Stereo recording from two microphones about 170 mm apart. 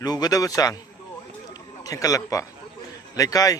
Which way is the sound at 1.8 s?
20° left (ahead or behind).